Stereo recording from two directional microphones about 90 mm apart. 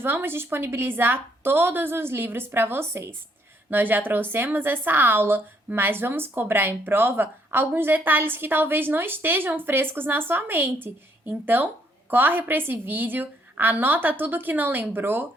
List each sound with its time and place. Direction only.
0.0 s a woman's voice: 25° right (ahead or behind)